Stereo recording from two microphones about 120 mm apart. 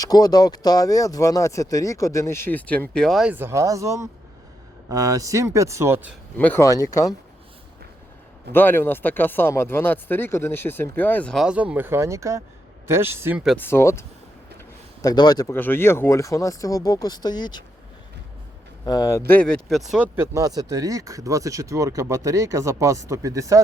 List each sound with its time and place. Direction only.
0.0 s speech: 30° left (ahead or behind); by 3.2 s 5° left (ahead or behind)
3.2 s speech: 20° right (ahead or behind)
6.3 s speech: 15° left (ahead or behind)
6.6 s speech: 30° left (ahead or behind)
8.5 s speech: 15° left (ahead or behind)
11.3 s speech: 10° right (ahead or behind)
13.6 s speech: 20° left (ahead or behind)
15.0 s speech: 35° left (ahead or behind)
15.5 s speech: 20° left (ahead or behind); by 17.6 s 35° left (ahead or behind)
18.9 s speech: 30° left (ahead or behind); by 19.8 s 5° left (ahead or behind)
20.1 s speech: 25° right (ahead or behind)